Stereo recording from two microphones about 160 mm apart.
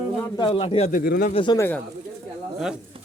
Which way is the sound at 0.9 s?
55° left (ahead or behind).